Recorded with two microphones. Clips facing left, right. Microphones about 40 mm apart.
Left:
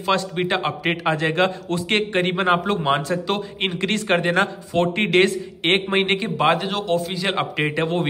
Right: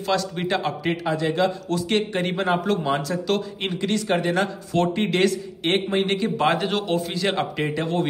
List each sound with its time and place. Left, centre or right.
0.1 s a man's voice: left
1.0 s speech: left
1.7 s a man's voice: left
2.6 s a man's voice: left
3.8 s a man's voice: left
6.3 s speech: centre
6.7 s a man's voice: centre
7.1 s speech: centre
7.6 s a man's voice: left